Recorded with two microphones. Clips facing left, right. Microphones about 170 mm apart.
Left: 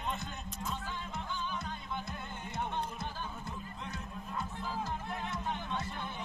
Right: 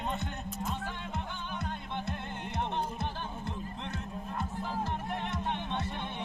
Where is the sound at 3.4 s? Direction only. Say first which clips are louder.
Right 4 dB; 65° right (ahead or behind).